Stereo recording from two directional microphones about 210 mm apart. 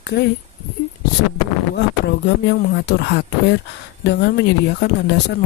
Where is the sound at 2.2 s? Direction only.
55° left (ahead or behind).